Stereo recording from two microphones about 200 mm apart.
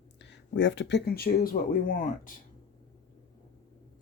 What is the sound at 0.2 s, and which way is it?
Speech, 65° left (ahead or behind).